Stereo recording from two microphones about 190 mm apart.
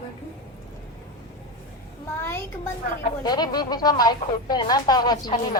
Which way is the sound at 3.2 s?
20° left (ahead or behind).